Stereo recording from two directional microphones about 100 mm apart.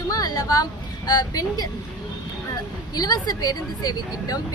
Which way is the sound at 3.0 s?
40° left (ahead or behind).